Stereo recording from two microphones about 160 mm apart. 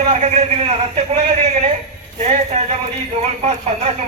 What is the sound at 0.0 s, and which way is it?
A man's voice, 45° right (ahead or behind).